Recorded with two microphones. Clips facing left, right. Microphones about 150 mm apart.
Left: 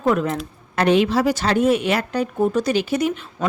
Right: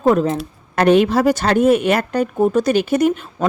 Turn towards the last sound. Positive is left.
turn(degrees=-50)  # may be behind; listen again after turning